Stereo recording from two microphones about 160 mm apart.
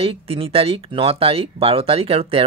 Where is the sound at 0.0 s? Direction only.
35° right (ahead or behind).